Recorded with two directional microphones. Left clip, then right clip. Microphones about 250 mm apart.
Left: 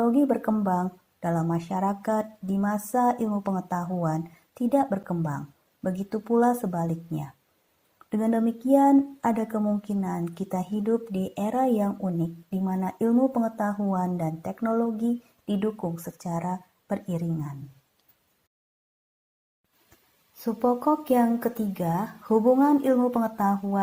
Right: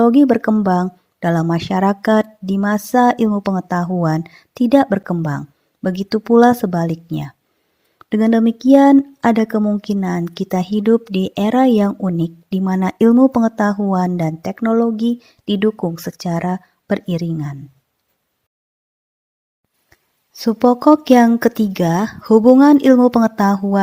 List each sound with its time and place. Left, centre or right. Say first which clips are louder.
0.0 s speech: right 11 dB; right
20.4 s speech: right 11 dB; right